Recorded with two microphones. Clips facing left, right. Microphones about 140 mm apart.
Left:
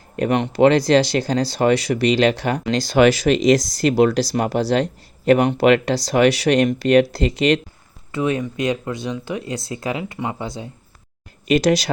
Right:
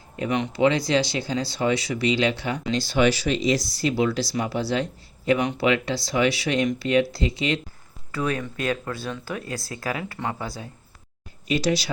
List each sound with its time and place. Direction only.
0.2 s speech: 60° left (ahead or behind); by 7.6 s 75° left (ahead or behind)
8.1 s speech: 20° left (ahead or behind)
11.4 s speech: 85° left